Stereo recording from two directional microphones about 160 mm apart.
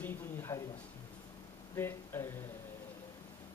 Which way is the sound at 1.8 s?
15° left (ahead or behind).